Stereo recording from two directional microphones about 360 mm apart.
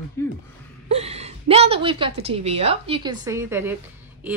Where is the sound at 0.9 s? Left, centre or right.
Centre.